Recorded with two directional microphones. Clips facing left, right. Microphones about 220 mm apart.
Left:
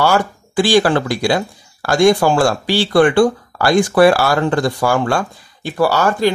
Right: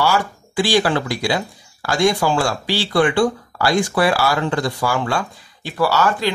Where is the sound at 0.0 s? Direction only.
50° left (ahead or behind).